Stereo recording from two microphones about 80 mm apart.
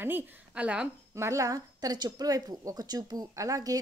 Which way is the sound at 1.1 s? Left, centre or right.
Right.